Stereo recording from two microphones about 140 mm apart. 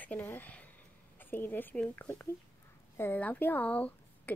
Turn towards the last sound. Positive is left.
turn(degrees=10)  # may be behind; listen again after turning